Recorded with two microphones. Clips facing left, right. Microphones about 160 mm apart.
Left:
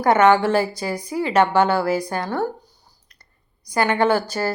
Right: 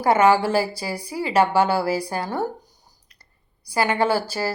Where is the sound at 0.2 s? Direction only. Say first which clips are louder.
Left 2 dB; 10° right (ahead or behind).